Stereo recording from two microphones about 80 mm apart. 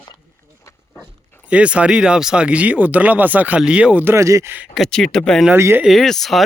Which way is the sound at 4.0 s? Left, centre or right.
Right.